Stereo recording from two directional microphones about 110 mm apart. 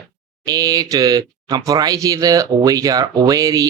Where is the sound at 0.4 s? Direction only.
35° right (ahead or behind).